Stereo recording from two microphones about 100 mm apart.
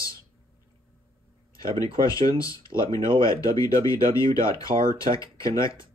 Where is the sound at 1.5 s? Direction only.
35° left (ahead or behind).